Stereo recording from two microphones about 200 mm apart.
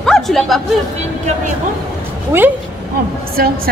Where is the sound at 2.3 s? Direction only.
10° right (ahead or behind).